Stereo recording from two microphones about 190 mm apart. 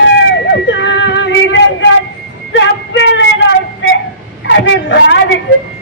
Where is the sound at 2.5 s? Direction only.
75° left (ahead or behind).